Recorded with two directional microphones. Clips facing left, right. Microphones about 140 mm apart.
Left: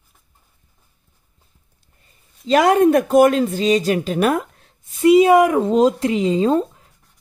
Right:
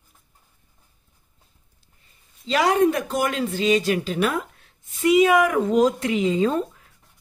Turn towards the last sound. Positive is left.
turn(degrees=25)  # may be behind; listen again after turning